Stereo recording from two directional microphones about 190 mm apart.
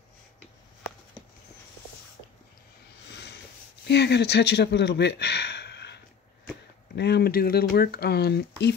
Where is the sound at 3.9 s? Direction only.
65° left (ahead or behind).